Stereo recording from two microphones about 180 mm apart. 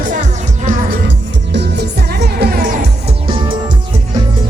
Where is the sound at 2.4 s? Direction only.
60° right (ahead or behind).